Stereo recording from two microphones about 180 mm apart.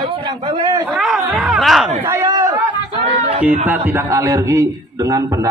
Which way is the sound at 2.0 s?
15° right (ahead or behind).